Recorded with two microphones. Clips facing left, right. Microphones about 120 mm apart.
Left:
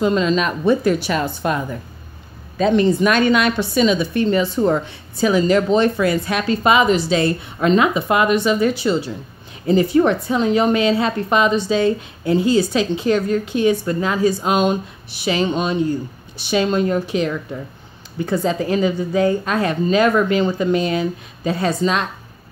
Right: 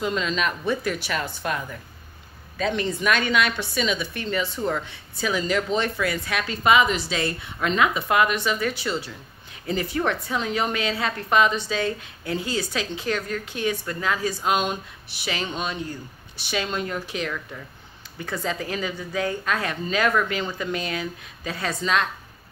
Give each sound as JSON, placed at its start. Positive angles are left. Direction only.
{"t": 0.0, "sound": "a woman's voice", "side_deg": 35}